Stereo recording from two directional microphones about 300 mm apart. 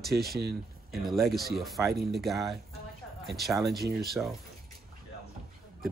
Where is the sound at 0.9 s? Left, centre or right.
Centre.